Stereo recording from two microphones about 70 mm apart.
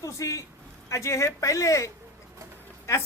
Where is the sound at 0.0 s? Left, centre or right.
Left.